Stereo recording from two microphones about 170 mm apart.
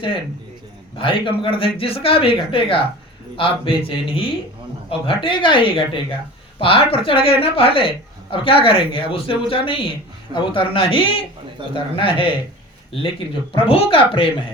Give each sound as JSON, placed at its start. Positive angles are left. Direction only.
{"t": 0.9, "sound": "speech", "side_deg": 30}